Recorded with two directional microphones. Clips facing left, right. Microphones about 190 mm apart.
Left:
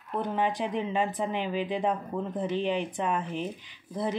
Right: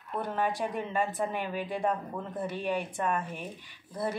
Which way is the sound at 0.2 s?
20° left (ahead or behind).